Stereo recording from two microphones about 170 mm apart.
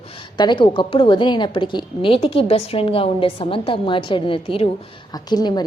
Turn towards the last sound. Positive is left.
turn(degrees=25)  # may be behind; listen again after turning